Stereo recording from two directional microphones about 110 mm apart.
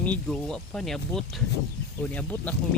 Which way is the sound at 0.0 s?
10° left (ahead or behind).